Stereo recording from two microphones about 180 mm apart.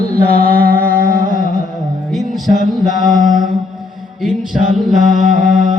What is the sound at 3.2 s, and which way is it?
Mantra, centre (ahead or behind).